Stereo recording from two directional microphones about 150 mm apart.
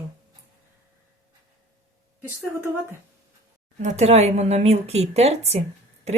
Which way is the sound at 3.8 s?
50° right (ahead or behind).